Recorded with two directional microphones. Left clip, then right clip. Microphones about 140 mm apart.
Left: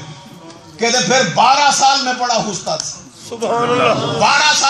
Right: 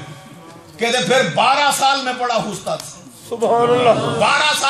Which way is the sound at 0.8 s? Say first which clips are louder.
Left 2 dB; 5° right (ahead or behind).